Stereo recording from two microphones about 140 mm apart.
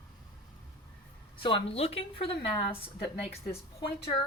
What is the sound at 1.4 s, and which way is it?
A woman's voice, 40° left (ahead or behind).